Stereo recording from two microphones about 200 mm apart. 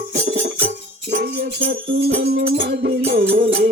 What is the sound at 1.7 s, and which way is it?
Music, 50° right (ahead or behind).